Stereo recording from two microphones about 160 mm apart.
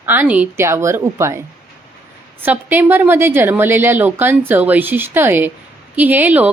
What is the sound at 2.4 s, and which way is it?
A woman's voice, 10° right (ahead or behind).